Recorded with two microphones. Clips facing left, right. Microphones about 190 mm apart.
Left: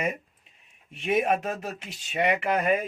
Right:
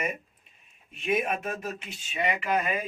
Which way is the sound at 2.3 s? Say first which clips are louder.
Left 4 dB; 60° left (ahead or behind).